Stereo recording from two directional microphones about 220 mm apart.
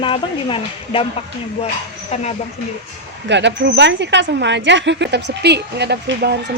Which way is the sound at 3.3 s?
50° right (ahead or behind).